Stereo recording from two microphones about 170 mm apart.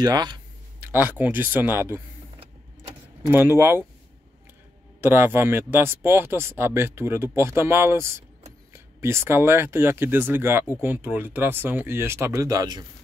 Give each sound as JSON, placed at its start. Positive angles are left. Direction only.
{"t": 0.0, "sound": "speech", "side_deg": -25}
{"t": 0.9, "sound": "speech", "side_deg": -10}
{"t": 3.3, "sound": "speech", "side_deg": -15}
{"t": 5.0, "sound": "speech", "side_deg": -10}